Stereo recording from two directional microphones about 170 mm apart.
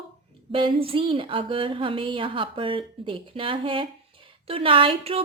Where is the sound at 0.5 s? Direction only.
30° right (ahead or behind).